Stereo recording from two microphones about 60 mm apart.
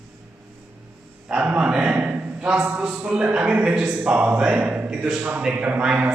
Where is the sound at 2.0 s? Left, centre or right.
Right.